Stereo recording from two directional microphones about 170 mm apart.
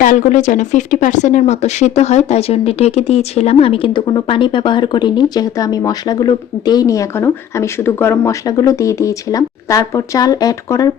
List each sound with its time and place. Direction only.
0.0 s speech: 50° left (ahead or behind); by 10.9 s 20° left (ahead or behind)